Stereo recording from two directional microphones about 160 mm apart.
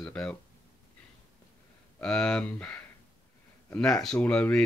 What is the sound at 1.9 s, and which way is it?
Speech, 5° left (ahead or behind).